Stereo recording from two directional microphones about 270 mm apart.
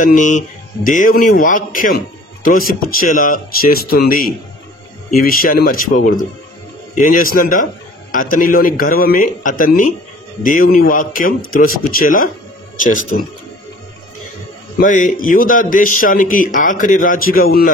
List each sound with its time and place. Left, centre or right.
0.0 s speech: left
14.8 s speech: left